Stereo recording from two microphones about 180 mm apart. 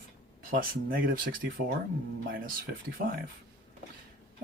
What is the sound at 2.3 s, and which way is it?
Speech, 55° right (ahead or behind).